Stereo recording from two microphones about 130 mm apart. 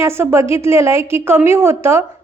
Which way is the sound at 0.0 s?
20° right (ahead or behind).